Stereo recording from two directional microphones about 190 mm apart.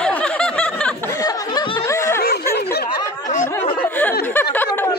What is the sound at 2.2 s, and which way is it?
Snicker, 55° left (ahead or behind).